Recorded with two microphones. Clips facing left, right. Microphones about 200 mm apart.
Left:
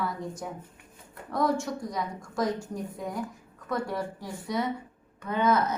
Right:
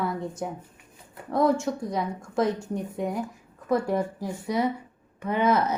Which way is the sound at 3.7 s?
30° right (ahead or behind).